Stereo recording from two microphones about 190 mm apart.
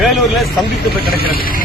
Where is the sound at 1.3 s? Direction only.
50° left (ahead or behind).